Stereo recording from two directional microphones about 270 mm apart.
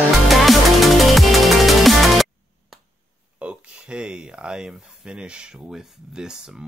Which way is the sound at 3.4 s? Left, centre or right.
Centre.